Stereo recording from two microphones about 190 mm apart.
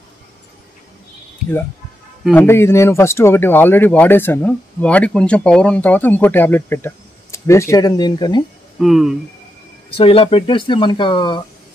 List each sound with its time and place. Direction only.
2.3 s speech: 15° left (ahead or behind)
8.7 s speech: centre (ahead or behind)
9.8 s speech: 30° left (ahead or behind)